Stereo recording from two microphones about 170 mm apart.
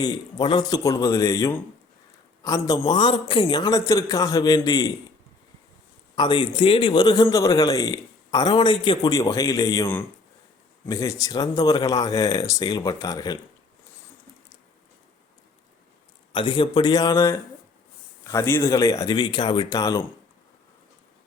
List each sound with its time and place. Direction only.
0.0 s a man's voice: 25° left (ahead or behind)
6.1 s a man's voice: 25° left (ahead or behind)
16.3 s a man's voice: 30° left (ahead or behind)